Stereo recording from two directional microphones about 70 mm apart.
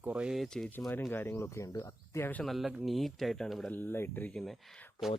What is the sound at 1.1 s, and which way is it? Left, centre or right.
Speech, left.